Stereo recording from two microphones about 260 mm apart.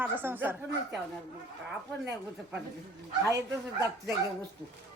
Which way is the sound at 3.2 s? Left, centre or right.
Centre.